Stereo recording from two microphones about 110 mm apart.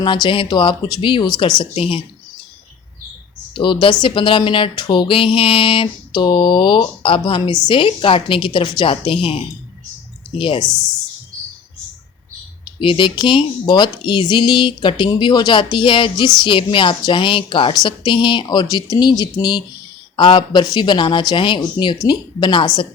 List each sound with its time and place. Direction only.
0.0 s speech: 45° left (ahead or behind)
1.7 s speech: 55° left (ahead or behind)
3.5 s a woman's voice: 50° left (ahead or behind)
12.6 s speech: 50° left (ahead or behind)